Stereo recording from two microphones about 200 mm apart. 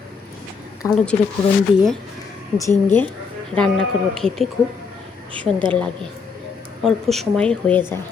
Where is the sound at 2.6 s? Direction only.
10° left (ahead or behind).